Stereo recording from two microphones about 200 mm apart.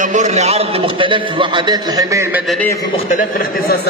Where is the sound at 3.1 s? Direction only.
50° left (ahead or behind).